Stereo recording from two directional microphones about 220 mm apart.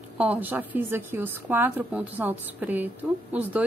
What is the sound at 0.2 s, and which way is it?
A woman's voice, 5° right (ahead or behind).